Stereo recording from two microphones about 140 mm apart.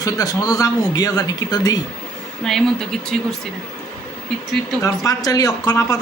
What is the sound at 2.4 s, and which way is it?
Speech, centre (ahead or behind).